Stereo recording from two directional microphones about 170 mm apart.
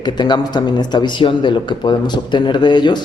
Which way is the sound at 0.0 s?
25° left (ahead or behind).